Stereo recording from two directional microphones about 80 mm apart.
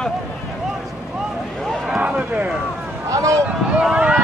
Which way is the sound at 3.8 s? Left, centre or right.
Centre.